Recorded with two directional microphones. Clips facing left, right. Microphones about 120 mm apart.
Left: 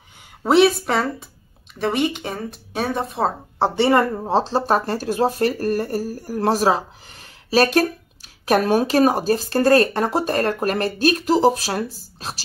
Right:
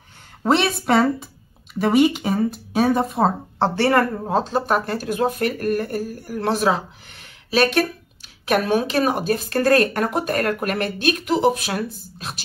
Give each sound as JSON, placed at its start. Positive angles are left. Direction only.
{"t": 0.4, "sound": "speech", "side_deg": 5}
{"t": 3.5, "sound": "speech", "side_deg": 15}